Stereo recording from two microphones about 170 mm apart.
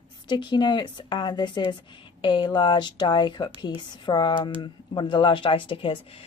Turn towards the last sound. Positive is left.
turn(degrees=30)  # may be behind; listen again after turning